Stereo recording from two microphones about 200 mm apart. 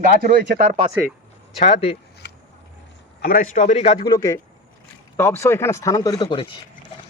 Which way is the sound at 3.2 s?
40° left (ahead or behind).